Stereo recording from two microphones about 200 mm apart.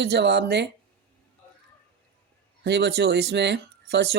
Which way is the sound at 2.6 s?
55° right (ahead or behind).